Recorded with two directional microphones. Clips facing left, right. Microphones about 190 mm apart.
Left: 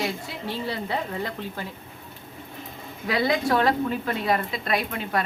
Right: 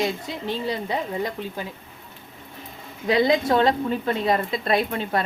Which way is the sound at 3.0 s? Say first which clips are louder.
Right 4 dB; 20° right (ahead or behind).